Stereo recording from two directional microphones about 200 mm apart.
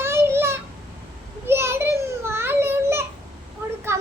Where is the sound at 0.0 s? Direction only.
10° right (ahead or behind).